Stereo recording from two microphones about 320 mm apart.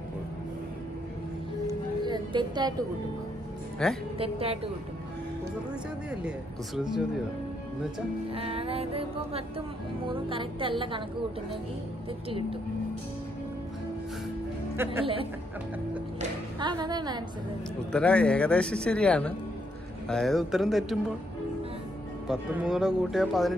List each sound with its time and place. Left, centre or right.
1.7 s a sound: centre
3.8 s speech: centre
4.2 s music: centre
6.2 s speech: centre
8.4 s music: centre
12.3 s music: centre
14.8 s music: centre
16.2 s music: centre
17.9 s speech: centre
22.3 s speech: centre